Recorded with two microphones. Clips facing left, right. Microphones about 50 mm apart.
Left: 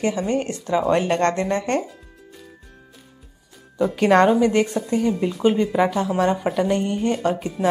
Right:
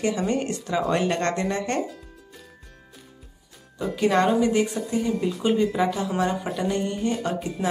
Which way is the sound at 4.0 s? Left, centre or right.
Left.